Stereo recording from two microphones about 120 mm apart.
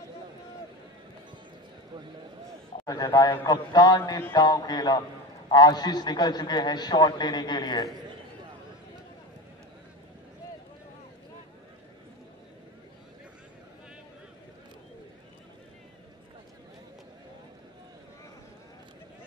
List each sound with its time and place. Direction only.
2.8 s a man's voice: 30° left (ahead or behind)